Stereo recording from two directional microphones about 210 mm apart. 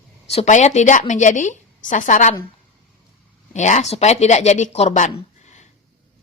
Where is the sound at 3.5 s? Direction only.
35° left (ahead or behind).